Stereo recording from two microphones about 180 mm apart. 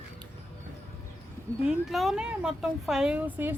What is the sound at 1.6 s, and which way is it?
Speech, centre (ahead or behind).